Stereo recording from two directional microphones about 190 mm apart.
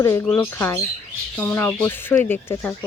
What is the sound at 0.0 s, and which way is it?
Speech, 15° left (ahead or behind).